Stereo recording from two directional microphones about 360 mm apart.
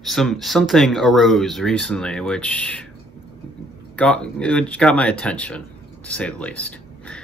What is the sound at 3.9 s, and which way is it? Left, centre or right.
Speech, centre.